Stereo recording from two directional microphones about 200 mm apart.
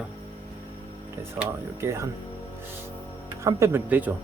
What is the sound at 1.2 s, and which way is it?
Speech, 10° right (ahead or behind).